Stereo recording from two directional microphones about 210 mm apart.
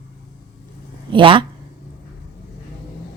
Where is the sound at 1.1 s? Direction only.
25° right (ahead or behind).